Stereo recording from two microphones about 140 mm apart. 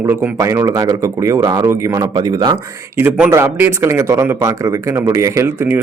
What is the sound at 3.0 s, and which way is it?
Speech, 10° right (ahead or behind).